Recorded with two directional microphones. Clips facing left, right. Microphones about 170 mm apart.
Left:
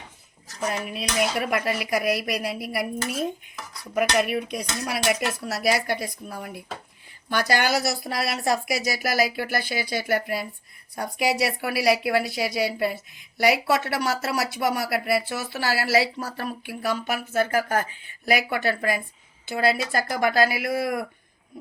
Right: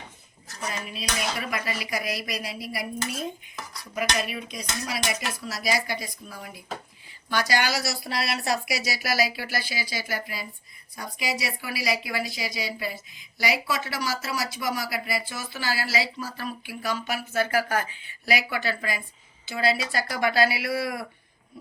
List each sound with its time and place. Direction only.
0.7 s a woman's voice: 60° left (ahead or behind)